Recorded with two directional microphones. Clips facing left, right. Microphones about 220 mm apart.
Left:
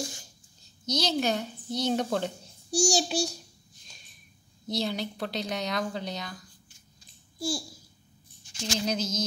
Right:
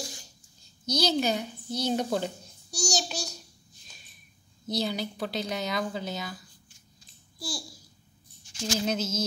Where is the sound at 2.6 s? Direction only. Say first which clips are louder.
Left 6 dB; 30° left (ahead or behind).